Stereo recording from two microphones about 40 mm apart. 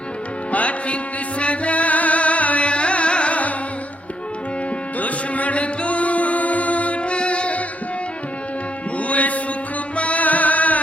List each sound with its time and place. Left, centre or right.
0.5 s music: left
4.9 s music: left
9.0 s music: left